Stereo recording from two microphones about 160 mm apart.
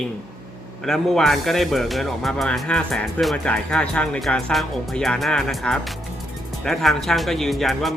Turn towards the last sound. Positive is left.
turn(degrees=0)  # may be behind; listen again after turning